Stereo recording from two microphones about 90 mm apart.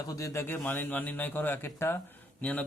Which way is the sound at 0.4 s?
25° left (ahead or behind).